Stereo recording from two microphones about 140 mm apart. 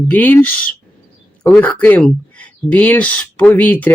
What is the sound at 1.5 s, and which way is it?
Speech, 10° left (ahead or behind).